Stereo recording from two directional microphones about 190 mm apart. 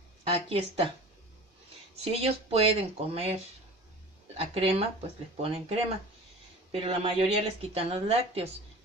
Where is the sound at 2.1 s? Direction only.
30° right (ahead or behind).